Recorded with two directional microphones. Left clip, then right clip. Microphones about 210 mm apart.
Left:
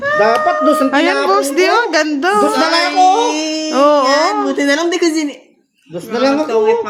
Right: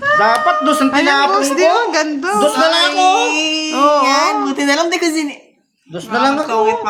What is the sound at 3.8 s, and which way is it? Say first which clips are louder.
Speech: left 2 dB; 30° left (ahead or behind).